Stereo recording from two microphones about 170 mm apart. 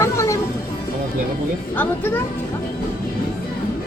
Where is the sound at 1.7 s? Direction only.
10° left (ahead or behind).